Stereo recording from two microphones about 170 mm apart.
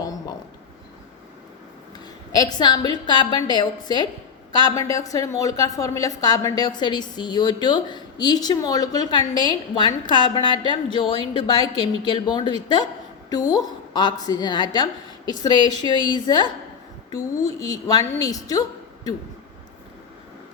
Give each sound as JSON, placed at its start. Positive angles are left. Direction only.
{"t": 2.4, "sound": "a woman's voice", "side_deg": 25}